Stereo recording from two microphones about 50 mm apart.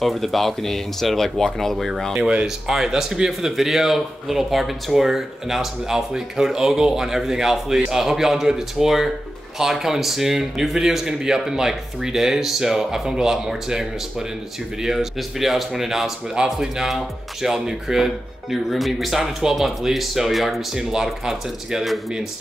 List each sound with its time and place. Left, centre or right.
0.0 s speech: centre
2.1 s speech: right
2.4 s speech: centre